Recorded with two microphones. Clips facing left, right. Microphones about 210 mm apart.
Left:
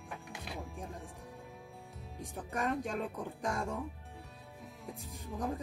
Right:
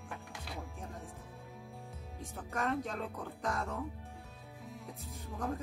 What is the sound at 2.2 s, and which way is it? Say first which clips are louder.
Speech: left 1 dB; 15° left (ahead or behind).